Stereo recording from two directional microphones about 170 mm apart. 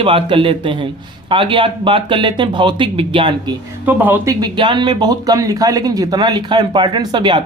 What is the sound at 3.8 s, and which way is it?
Speech, 10° right (ahead or behind).